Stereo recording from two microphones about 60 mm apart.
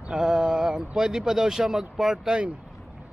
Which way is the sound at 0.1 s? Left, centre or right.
Centre.